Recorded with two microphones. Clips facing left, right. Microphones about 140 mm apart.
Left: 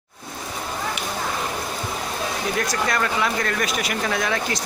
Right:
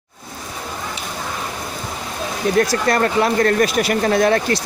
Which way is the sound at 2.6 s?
40° right (ahead or behind).